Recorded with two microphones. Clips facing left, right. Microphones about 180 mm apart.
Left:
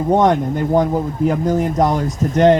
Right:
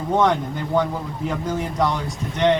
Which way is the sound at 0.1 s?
45° left (ahead or behind).